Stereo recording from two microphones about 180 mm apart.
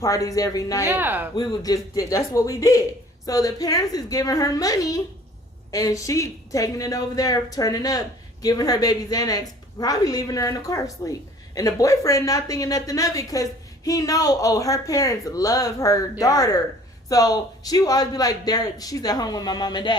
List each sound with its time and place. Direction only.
0.0 s a woman's voice: 20° left (ahead or behind)
0.9 s speech: 10° right (ahead or behind)
1.4 s a woman's voice: 20° left (ahead or behind)